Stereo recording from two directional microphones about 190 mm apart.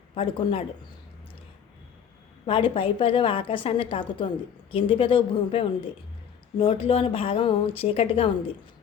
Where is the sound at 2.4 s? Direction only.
30° left (ahead or behind).